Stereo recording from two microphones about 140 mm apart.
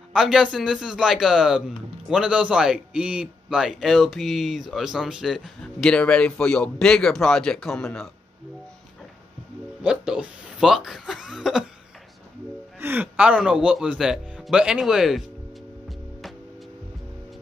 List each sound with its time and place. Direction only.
0.1 s a man's voice: 5° right (ahead or behind)
9.8 s a man's voice: 5° right (ahead or behind)
12.8 s a man's voice: 15° right (ahead or behind)